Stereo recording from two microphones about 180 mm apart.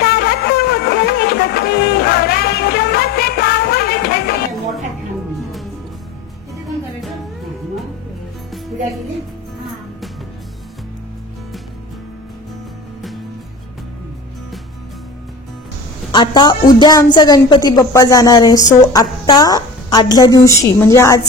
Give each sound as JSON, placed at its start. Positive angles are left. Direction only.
{"t": 0.0, "sound": "music", "side_deg": 65}
{"t": 16.1, "sound": "a woman's voice", "side_deg": 25}